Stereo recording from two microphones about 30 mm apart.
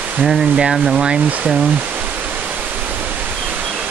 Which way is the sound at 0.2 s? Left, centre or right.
Centre.